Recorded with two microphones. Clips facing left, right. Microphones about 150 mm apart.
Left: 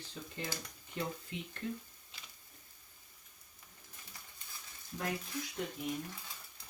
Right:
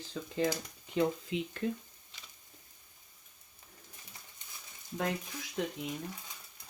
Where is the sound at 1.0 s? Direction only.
90° right.